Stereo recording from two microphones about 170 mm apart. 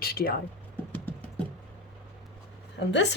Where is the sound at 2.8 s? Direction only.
90° left.